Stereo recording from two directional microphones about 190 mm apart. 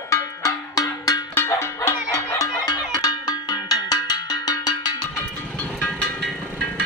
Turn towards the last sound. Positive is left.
turn(degrees=5)  # may be behind; listen again after turning